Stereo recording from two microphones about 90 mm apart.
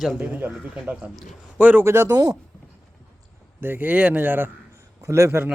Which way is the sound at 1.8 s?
30° right (ahead or behind).